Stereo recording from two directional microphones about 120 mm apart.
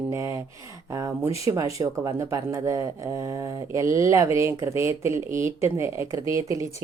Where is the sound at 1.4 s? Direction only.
30° right (ahead or behind).